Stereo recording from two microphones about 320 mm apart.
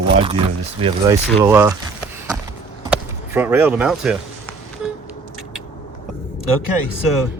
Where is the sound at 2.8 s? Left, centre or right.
Centre.